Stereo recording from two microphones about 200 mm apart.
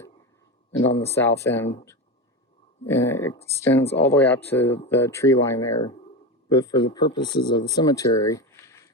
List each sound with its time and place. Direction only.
1.0 s speech: 10° left (ahead or behind)